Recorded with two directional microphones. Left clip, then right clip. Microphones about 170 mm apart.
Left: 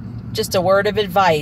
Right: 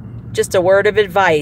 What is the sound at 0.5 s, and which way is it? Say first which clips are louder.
Speech: right 4 dB; 20° right (ahead or behind).